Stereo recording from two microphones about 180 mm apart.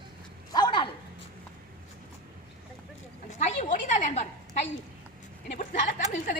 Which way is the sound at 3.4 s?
40° left (ahead or behind).